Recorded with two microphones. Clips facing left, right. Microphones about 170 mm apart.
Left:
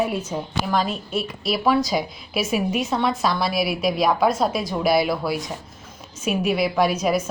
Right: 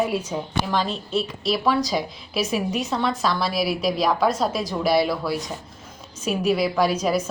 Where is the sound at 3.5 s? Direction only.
35° right (ahead or behind).